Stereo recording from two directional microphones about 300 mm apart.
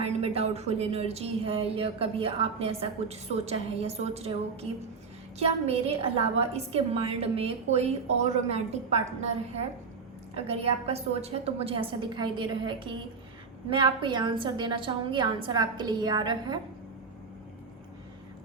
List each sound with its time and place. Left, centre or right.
0.0 s speech: centre
5.4 s speech: centre
10.3 s a woman's voice: centre